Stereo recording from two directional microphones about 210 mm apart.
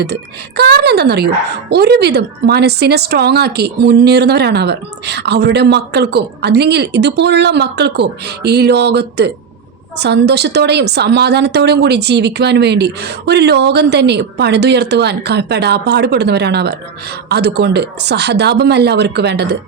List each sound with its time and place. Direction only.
0.0 s speech: 50° right (ahead or behind)